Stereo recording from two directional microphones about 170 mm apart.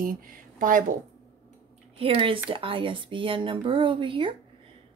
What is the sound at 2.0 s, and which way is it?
A woman's voice, 35° right (ahead or behind).